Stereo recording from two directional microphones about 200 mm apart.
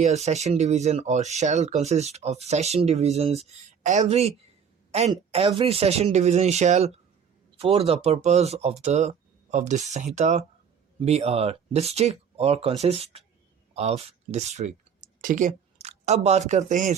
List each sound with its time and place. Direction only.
0.0 s speech: 35° right (ahead or behind)